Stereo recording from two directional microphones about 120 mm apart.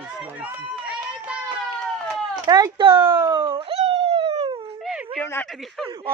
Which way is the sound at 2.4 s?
35° right (ahead or behind).